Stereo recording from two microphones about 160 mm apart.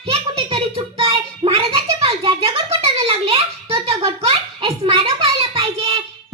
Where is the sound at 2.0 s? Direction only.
35° right (ahead or behind).